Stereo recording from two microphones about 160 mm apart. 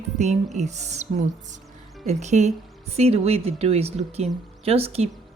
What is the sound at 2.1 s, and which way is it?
Speech, 45° right (ahead or behind).